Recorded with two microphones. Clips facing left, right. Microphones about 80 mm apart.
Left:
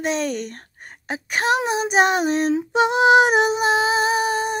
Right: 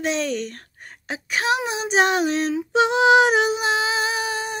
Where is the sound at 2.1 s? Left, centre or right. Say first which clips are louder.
Left 2 dB; left.